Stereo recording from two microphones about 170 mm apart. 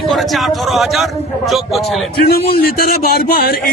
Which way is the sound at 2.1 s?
65° left (ahead or behind).